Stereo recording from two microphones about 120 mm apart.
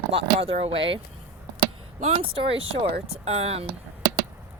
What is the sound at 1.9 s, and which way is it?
Speech, 60° right (ahead or behind).